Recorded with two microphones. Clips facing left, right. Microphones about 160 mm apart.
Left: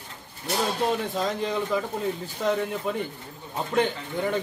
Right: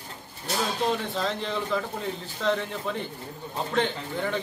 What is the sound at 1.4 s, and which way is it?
Speech, 10° left (ahead or behind).